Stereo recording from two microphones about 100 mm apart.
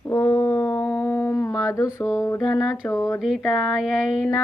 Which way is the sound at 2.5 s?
30° left (ahead or behind).